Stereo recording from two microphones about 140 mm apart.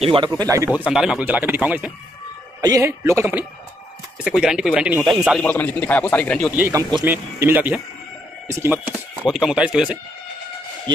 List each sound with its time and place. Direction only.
0.0 s speech: 40° right (ahead or behind)
0.3 s a man's voice: 20° right (ahead or behind)
0.7 s speech: 10° right (ahead or behind)
2.6 s a man's voice: 25° right (ahead or behind)
4.2 s speech: 5° right (ahead or behind)
5.4 s a man's voice: 10° left (ahead or behind)
6.7 s a man's voice: 25° right (ahead or behind)
7.1 s a man's voice: 15° right (ahead or behind)
8.8 s speech: 5° right (ahead or behind)